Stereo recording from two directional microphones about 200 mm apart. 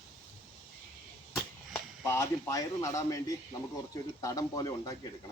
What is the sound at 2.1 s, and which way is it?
A man's voice, 15° left (ahead or behind).